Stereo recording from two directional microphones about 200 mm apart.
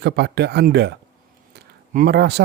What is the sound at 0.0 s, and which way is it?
Speech, 55° right (ahead or behind).